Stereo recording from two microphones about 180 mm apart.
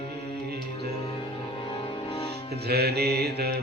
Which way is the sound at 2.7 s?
60° right (ahead or behind).